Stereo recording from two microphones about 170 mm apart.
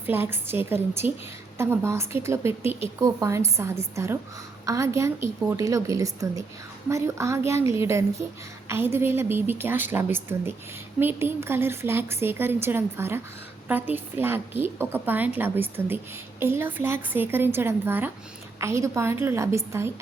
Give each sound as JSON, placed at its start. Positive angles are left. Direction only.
{"t": 0.0, "sound": "a woman's voice", "side_deg": -10}